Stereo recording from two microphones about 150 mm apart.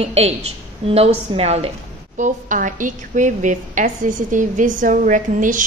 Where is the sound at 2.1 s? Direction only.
60° right (ahead or behind).